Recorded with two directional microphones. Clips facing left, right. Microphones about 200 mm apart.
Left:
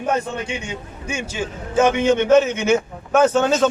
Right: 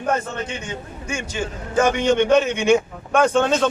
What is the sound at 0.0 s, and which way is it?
A man's voice, 10° left (ahead or behind).